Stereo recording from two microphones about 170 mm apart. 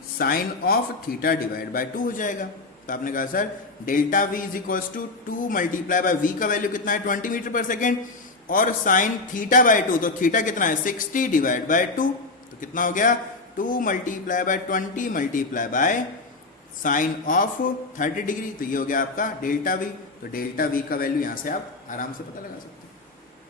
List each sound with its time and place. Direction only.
0.2 s a man's voice: 60° left (ahead or behind)